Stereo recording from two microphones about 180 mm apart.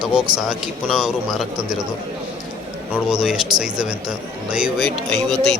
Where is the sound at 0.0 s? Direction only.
5° right (ahead or behind).